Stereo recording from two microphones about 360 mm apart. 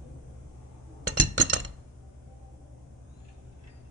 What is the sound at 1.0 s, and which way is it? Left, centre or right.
Chink, right.